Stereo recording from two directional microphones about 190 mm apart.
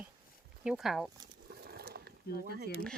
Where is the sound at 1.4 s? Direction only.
55° right (ahead or behind).